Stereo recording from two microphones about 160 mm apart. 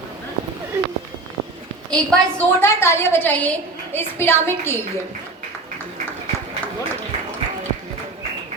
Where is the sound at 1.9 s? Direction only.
5° left (ahead or behind).